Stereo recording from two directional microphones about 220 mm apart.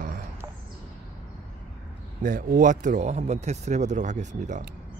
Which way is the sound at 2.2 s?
40° right (ahead or behind).